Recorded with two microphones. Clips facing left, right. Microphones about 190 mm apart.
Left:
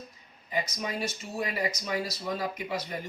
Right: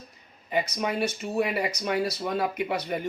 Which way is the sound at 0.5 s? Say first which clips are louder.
Right 5 dB; 65° right (ahead or behind).